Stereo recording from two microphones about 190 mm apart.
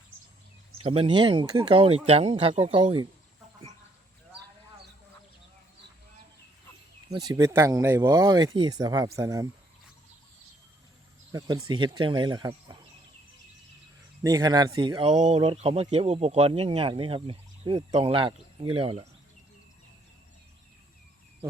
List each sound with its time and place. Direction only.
0.8 s speech: 25° right (ahead or behind)
7.1 s speech: 20° right (ahead or behind)
11.3 s speech: 20° right (ahead or behind)
14.3 s speech: 20° right (ahead or behind)